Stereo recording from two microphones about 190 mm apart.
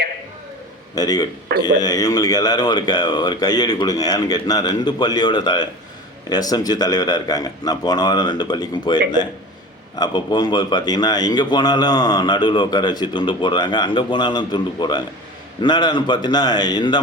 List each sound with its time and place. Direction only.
0.9 s a man's voice: 20° left (ahead or behind)